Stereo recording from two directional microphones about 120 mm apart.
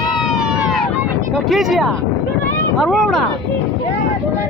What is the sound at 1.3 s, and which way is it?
Speech, centre (ahead or behind).